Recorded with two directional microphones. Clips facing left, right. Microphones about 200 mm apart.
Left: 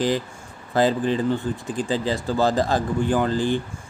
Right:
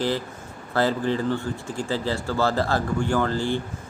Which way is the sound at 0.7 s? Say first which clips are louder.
Left 3 dB; 15° left (ahead or behind).